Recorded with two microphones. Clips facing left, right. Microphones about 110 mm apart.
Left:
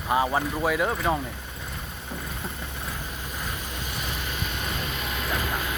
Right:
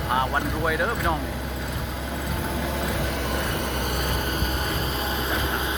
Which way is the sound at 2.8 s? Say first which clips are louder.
Right 9 dB; 80° right.